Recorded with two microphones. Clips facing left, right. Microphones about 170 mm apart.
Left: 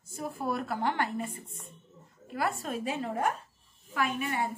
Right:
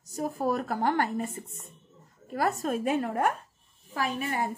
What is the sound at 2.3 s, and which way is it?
A woman's voice, 40° right (ahead or behind).